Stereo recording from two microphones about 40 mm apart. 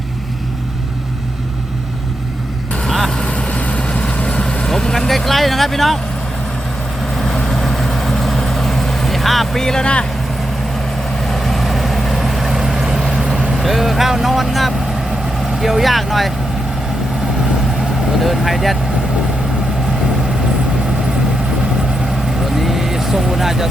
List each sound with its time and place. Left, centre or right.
3.2 s vehicle: left
4.7 s vehicle: centre
7.4 s vehicle: centre
9.8 s speech: left
11.3 s vehicle: centre
15.6 s speech: centre
18.2 s speech: centre
22.5 s vehicle: centre